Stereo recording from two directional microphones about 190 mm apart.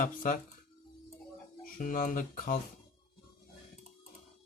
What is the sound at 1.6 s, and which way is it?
Speech, 45° left (ahead or behind).